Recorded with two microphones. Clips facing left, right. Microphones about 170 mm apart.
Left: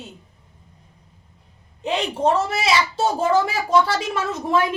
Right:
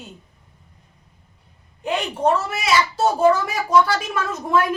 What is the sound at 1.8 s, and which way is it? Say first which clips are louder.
A woman's voice: even; 25° left (ahead or behind).